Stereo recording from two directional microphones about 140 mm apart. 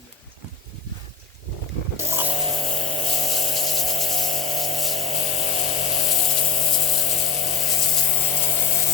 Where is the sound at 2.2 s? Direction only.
40° right (ahead or behind).